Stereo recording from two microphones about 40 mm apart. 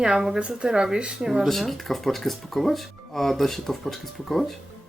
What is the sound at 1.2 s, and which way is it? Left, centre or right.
Speech, centre.